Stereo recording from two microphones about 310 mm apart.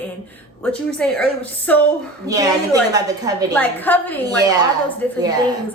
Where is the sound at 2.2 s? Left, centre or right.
Centre.